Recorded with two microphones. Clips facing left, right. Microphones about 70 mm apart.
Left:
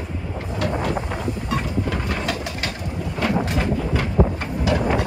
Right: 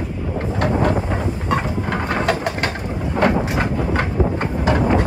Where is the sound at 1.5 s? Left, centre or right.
Right.